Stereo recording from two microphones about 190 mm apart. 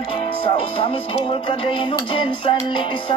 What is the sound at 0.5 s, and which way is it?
Music, 30° left (ahead or behind).